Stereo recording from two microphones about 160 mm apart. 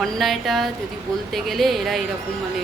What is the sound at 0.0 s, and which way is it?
Speech, centre (ahead or behind).